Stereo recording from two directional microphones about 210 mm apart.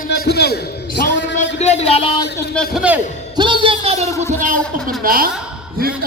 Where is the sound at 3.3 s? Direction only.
20° right (ahead or behind).